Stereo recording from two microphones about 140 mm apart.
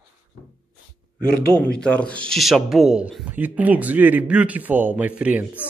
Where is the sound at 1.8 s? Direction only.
10° left (ahead or behind); by 5.6 s 10° right (ahead or behind).